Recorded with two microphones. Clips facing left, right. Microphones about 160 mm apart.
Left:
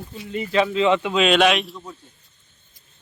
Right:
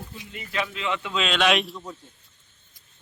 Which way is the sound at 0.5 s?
30° left (ahead or behind).